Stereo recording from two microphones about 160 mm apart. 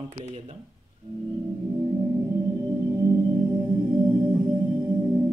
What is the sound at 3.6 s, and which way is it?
Music, 30° right (ahead or behind).